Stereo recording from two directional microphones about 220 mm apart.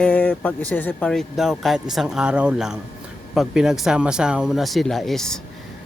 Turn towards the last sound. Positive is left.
turn(degrees=0)  # may be behind; listen again after turning